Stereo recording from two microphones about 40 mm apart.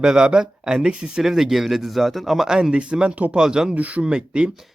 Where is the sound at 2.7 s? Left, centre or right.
Right.